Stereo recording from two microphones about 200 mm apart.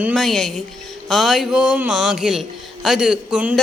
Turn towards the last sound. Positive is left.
turn(degrees=-5)  # may be behind; listen again after turning